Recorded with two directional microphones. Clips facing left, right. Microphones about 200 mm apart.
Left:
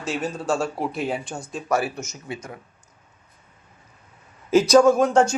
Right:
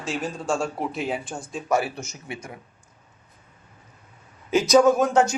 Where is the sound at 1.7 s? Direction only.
25° right (ahead or behind).